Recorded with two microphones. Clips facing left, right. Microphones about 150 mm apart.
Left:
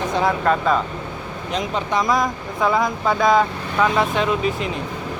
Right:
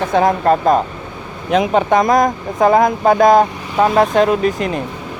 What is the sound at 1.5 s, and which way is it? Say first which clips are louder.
Speech: right 9 dB; 55° right (ahead or behind).